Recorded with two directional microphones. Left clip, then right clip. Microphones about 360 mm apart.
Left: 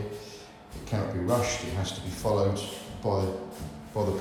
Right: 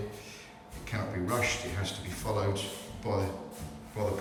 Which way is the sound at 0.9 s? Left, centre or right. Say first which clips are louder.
Left 5 dB; centre.